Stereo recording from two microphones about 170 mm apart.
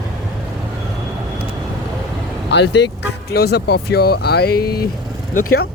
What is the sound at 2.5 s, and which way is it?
Speech, 90° left.